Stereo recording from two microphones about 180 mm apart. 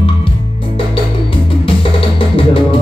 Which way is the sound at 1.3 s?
30° left (ahead or behind).